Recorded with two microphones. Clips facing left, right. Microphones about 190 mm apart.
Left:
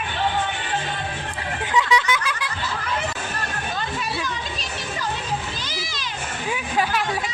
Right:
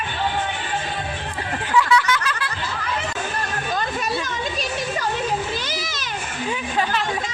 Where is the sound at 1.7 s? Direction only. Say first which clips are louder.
Right 2 dB; 20° left (ahead or behind).